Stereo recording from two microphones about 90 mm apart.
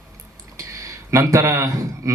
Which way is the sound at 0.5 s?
35° right (ahead or behind).